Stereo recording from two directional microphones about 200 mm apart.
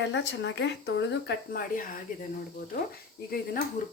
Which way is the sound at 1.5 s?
45° left (ahead or behind).